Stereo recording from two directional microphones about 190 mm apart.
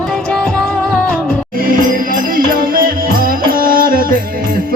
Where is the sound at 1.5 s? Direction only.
45° right (ahead or behind).